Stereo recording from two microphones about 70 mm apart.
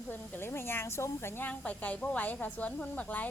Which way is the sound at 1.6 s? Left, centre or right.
Left.